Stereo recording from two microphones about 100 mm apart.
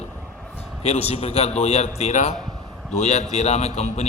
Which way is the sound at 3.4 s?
90° left.